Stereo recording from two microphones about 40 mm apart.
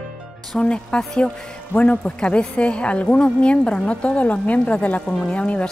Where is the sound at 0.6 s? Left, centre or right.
Left.